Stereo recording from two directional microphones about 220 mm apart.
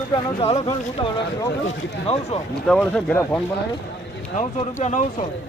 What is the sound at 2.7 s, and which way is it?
Speech, 5° left (ahead or behind).